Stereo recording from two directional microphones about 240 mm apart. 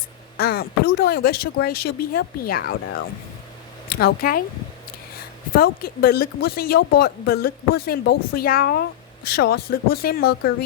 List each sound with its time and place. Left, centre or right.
0.3 s a woman's voice: left
5.5 s a woman's voice: left